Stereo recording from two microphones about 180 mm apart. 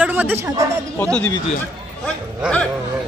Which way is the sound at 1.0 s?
5° left (ahead or behind).